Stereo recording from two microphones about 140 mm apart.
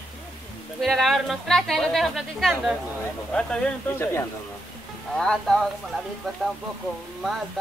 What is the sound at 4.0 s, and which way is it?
Speech, 20° left (ahead or behind).